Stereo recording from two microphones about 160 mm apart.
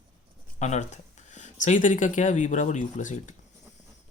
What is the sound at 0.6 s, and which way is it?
Speech, 45° left (ahead or behind).